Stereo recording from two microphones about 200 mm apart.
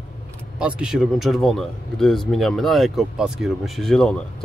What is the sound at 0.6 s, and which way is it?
Speech, 5° right (ahead or behind).